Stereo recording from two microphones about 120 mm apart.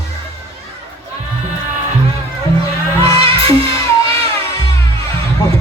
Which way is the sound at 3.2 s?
50° right (ahead or behind).